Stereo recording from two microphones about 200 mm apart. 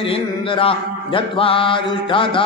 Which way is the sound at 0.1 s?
25° left (ahead or behind).